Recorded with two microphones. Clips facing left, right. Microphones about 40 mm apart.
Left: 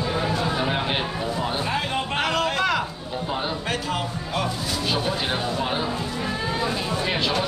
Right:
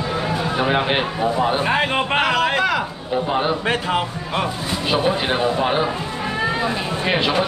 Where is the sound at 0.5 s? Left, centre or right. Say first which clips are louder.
Right 5 dB; right.